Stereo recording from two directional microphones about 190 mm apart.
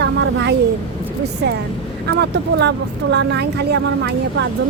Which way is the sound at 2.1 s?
60° right (ahead or behind).